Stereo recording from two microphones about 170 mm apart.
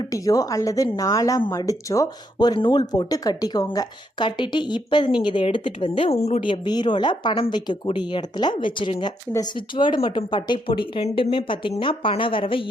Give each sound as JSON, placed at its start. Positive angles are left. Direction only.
{"t": 0.0, "sound": "a woman's voice", "side_deg": 20}